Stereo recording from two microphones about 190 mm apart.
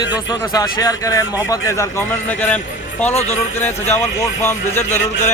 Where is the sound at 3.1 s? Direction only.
35° left (ahead or behind).